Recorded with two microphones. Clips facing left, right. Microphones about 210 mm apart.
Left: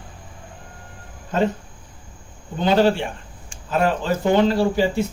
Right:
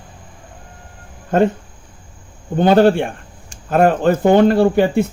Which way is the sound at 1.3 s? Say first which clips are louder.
Right 6 dB; 55° right (ahead or behind).